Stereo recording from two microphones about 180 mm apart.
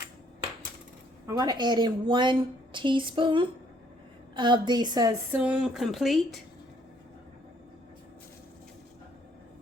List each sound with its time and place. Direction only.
1.3 s a woman's voice: 20° right (ahead or behind)
5.4 s speech: 5° right (ahead or behind)